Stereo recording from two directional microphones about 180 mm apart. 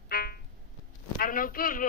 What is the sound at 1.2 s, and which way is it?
Speech, 50° left (ahead or behind).